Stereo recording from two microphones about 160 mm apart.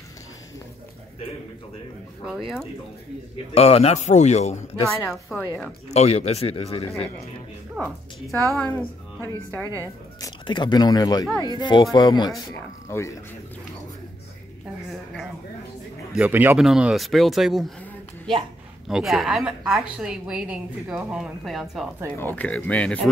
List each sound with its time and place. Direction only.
2.2 s a woman's voice: 5° right (ahead or behind)
3.5 s speech: 40° left (ahead or behind)
5.3 s a woman's voice: centre (ahead or behind)
5.9 s speech: 40° left (ahead or behind)
7.8 s a woman's voice: 5° left (ahead or behind)
10.2 s speech: 30° left (ahead or behind)
16.1 s a man's voice: 10° right (ahead or behind)
18.9 s a woman's voice: 5° right (ahead or behind)
22.1 s speech: 10° left (ahead or behind)